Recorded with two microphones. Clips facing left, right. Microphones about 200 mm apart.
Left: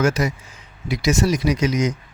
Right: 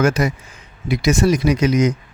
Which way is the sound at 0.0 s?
55° right (ahead or behind).